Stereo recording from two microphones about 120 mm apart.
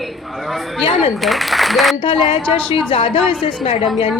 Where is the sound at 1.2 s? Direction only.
Centre (ahead or behind).